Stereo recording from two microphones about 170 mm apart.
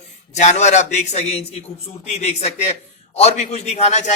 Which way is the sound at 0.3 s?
40° left (ahead or behind).